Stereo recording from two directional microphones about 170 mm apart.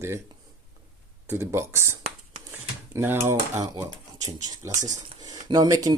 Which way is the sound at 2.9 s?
15° right (ahead or behind).